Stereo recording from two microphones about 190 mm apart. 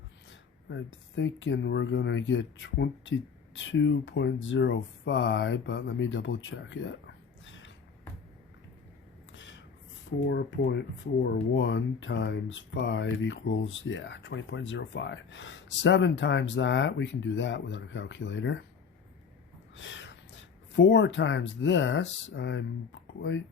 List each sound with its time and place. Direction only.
0.3 s speech: 75° left (ahead or behind)
10.2 s speech: 70° left (ahead or behind)
19.7 s speech: 75° left (ahead or behind)